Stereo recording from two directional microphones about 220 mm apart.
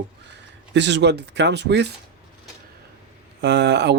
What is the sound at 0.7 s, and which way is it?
Speech, 50° right (ahead or behind).